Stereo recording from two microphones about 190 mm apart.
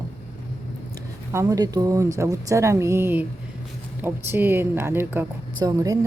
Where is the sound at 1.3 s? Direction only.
15° right (ahead or behind).